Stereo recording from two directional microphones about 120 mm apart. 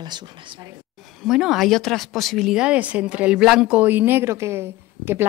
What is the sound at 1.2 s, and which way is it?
Speech, 5° right (ahead or behind).